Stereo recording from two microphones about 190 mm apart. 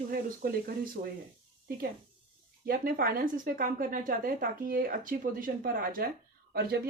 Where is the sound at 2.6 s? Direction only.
50° right (ahead or behind).